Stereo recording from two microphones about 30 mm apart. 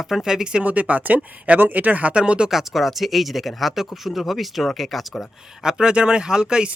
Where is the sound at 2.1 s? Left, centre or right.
Right.